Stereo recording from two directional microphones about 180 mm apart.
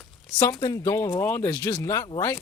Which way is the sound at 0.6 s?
15° left (ahead or behind).